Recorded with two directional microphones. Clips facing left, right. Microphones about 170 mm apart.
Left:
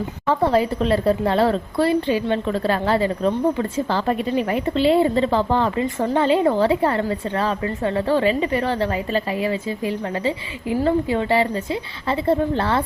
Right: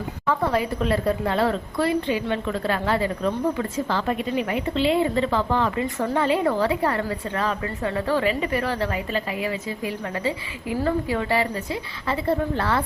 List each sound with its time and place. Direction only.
0.3 s a woman's voice: 30° left (ahead or behind)